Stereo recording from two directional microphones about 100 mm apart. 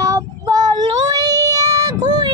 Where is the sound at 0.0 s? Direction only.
35° right (ahead or behind).